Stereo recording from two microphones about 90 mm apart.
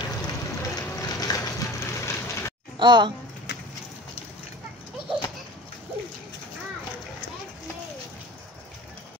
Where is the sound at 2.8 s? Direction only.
60° right (ahead or behind).